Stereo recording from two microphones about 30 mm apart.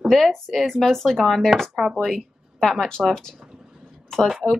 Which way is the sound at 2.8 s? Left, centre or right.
Left.